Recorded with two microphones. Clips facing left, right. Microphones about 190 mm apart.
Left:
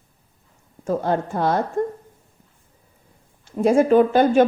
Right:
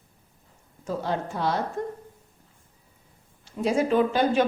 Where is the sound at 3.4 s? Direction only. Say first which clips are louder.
Left 7 dB; 50° left (ahead or behind).